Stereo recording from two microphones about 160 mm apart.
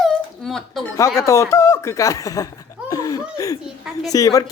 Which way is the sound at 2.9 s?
20° left (ahead or behind).